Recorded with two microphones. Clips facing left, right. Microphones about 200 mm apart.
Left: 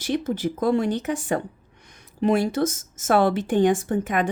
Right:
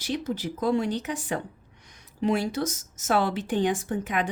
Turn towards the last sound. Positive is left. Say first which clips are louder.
# left 5 dB
turn(degrees=50)  # may be behind; listen again after turning